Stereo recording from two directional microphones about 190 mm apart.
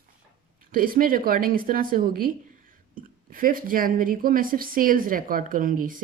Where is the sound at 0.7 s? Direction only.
50° right (ahead or behind).